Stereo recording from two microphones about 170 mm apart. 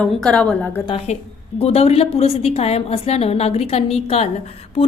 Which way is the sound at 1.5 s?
40° left (ahead or behind).